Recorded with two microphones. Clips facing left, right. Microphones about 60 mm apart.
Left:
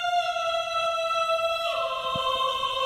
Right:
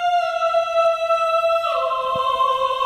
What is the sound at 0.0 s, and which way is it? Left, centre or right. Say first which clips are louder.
Music: right 7 dB; right.